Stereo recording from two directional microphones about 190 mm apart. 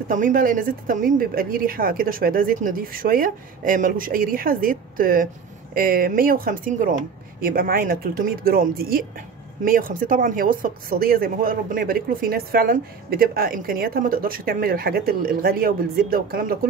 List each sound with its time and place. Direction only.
0.1 s speech: 45° right (ahead or behind)